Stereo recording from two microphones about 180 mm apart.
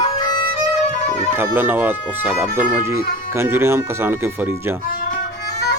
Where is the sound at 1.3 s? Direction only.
10° right (ahead or behind).